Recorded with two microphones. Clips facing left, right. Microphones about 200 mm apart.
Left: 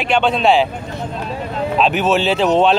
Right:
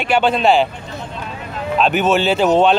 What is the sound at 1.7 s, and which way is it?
Speech, centre (ahead or behind).